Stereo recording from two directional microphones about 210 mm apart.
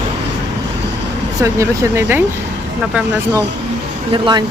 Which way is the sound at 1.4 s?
15° right (ahead or behind).